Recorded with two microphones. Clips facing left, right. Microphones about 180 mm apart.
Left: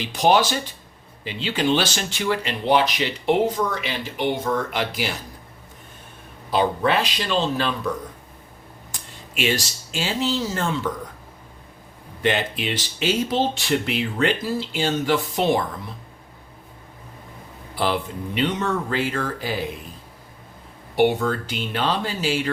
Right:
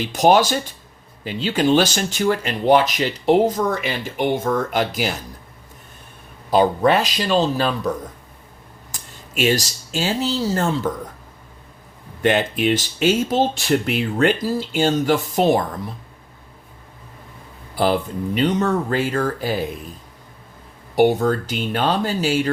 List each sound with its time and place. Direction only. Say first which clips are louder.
0.0 s speech: right 3 dB; 45° right (ahead or behind)
6.5 s speech: right 5 dB; 45° right (ahead or behind)
8.9 s speech: right 2 dB; 40° right (ahead or behind)
12.2 s speech: right 5 dB; 50° right (ahead or behind)
18.3 s speech: right 4 dB; 40° right (ahead or behind)
20.9 s speech: right 3 dB; 40° right (ahead or behind)